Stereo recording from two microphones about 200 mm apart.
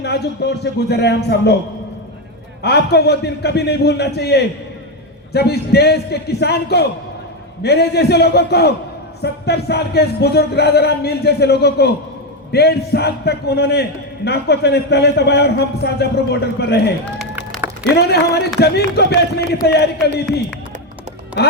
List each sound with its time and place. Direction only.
0.0 s a man's voice: 55° left (ahead or behind)
2.6 s a man's voice: 55° left (ahead or behind)
17.2 s a sound: 5° right (ahead or behind)
17.9 s a man's voice: 55° left (ahead or behind)